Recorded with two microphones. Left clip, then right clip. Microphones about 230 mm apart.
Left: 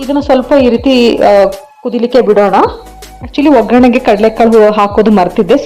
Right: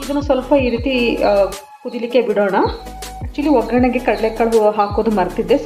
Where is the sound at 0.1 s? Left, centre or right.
Left.